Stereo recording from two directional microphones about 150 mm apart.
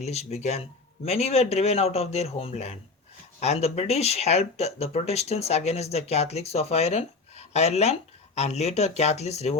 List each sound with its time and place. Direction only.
0.0 s speech: 45° left (ahead or behind)